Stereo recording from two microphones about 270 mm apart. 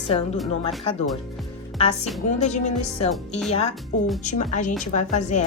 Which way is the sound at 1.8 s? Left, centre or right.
Left.